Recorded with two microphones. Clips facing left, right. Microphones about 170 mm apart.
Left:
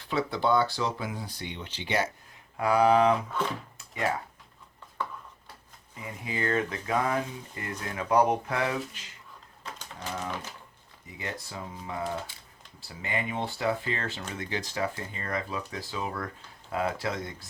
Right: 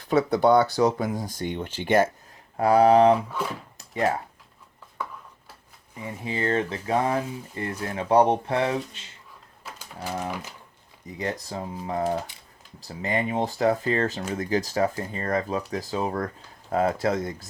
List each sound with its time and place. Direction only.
0.1 s speech: 45° right (ahead or behind)
2.6 s speech: 35° right (ahead or behind)
3.2 s speech: 10° right (ahead or behind)
3.8 s a sound: 35° right (ahead or behind)
6.0 s speech: 30° right (ahead or behind)
9.6 s typewriter: 5° right (ahead or behind)
11.2 s speech: 35° right (ahead or behind)